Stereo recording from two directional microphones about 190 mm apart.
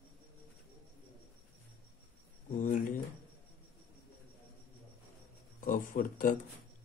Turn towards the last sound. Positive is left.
turn(degrees=45)  # may be behind; listen again after turning